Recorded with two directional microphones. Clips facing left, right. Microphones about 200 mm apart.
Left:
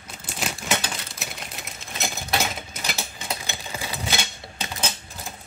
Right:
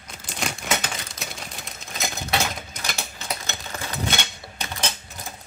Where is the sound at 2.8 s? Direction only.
5° left (ahead or behind).